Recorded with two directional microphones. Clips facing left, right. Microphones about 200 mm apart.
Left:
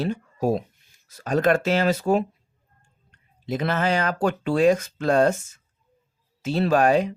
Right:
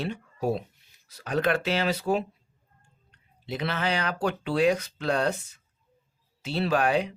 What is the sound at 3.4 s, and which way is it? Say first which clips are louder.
Speech: left 5 dB; 45° left (ahead or behind).